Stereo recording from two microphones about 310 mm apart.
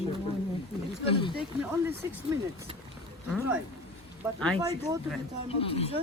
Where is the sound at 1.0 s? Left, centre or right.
Centre.